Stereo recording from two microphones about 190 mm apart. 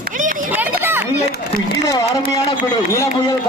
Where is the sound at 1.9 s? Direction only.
20° left (ahead or behind).